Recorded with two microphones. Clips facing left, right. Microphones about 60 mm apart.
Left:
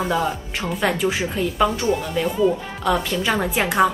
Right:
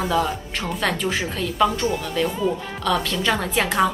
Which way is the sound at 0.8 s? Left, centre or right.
Centre.